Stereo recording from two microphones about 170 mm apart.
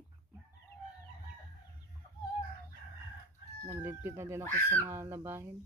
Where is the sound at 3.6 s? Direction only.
15° right (ahead or behind).